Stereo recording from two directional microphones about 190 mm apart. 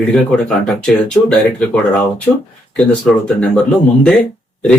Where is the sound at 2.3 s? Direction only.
20° left (ahead or behind).